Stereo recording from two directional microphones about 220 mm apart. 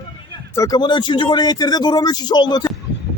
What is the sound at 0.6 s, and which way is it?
Speech, 20° left (ahead or behind).